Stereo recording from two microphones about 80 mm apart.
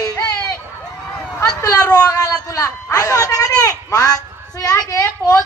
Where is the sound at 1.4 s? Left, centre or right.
Left.